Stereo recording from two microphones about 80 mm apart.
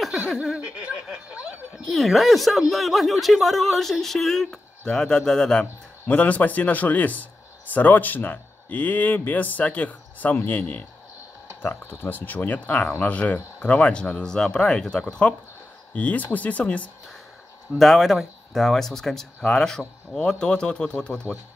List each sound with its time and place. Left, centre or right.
0.3 s speech: centre
1.9 s speech: centre
17.7 s speech: centre